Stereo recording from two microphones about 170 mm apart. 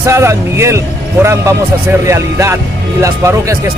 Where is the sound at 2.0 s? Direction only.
15° right (ahead or behind).